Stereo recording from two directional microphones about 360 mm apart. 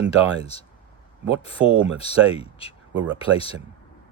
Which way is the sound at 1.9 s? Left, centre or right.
Centre.